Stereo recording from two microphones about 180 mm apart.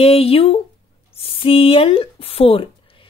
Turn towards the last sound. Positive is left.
turn(degrees=30)  # may be behind; listen again after turning